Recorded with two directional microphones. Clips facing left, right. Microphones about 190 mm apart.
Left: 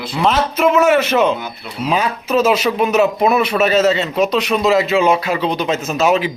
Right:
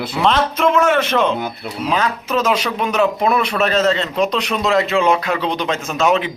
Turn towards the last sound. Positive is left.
turn(degrees=5)  # may be behind; listen again after turning